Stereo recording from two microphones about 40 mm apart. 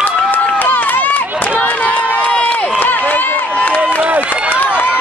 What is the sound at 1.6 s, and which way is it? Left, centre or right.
Run, left.